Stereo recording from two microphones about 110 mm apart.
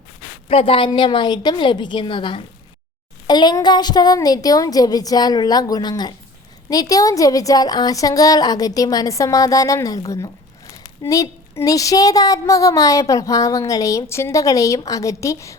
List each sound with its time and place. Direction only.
0.4 s a woman's voice: 55° left (ahead or behind); by 15.5 s 30° left (ahead or behind)